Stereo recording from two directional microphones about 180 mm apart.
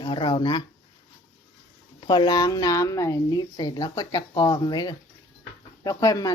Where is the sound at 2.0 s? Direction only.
25° left (ahead or behind).